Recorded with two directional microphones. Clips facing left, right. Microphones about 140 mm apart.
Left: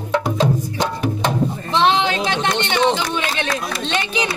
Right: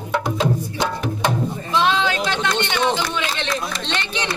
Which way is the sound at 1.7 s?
25° left (ahead or behind).